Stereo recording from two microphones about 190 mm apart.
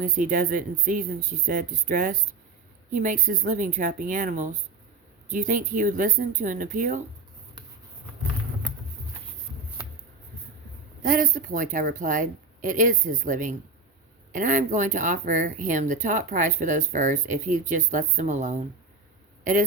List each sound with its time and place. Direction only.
0.0 s speech: 45° right (ahead or behind)
11.0 s speech: 45° right (ahead or behind)